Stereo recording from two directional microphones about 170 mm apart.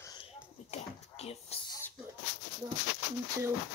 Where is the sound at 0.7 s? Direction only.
40° left (ahead or behind).